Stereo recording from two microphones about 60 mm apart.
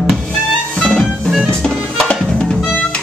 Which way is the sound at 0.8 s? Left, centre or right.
Centre.